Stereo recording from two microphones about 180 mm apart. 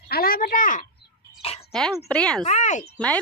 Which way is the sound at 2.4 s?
40° left (ahead or behind).